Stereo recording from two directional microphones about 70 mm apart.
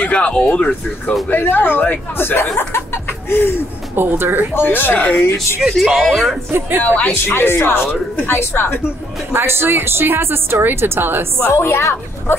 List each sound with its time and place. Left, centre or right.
0.0 s speech: centre; by 3.5 s left
3.9 s a woman's voice: right
4.6 s speech: left
5.6 s speech: centre
5.9 s speech: centre
6.8 s speech: centre
7.2 s speech: left
9.3 s a woman's voice: right
11.4 s speech: left